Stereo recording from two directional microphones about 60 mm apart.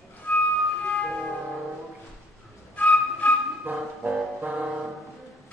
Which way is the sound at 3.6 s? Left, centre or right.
Right.